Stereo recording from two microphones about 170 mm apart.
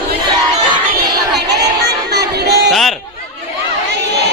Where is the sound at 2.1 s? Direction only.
75° right (ahead or behind).